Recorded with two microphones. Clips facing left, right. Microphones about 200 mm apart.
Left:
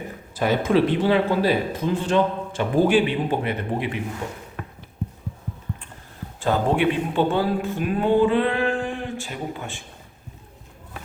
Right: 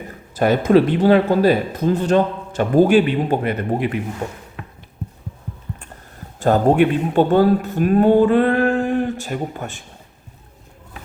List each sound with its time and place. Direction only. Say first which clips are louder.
0.7 s speech: right 6 dB; 45° right (ahead or behind)
6.4 s speech: right 6 dB; 45° right (ahead or behind)